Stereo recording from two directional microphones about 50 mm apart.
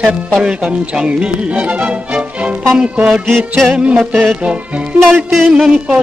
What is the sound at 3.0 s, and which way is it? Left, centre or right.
Speech, centre.